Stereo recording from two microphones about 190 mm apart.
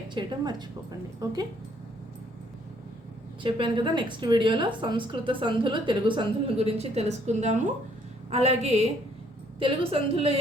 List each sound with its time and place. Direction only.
0.1 s a woman's voice: 25° right (ahead or behind)
3.4 s a woman's voice: 25° right (ahead or behind)